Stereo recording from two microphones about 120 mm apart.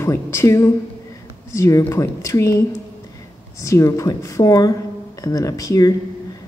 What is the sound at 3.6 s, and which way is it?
Speech, 25° left (ahead or behind).